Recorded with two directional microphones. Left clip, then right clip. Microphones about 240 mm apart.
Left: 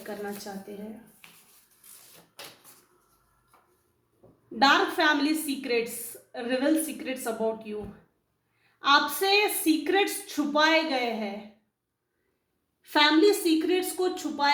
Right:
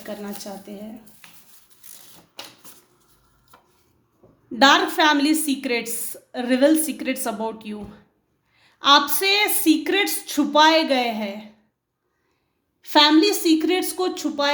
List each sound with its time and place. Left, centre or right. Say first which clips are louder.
4.5 s a woman's voice: right 6 dB; right
8.8 s a woman's voice: right 6 dB; right
12.8 s a woman's voice: right 5 dB; right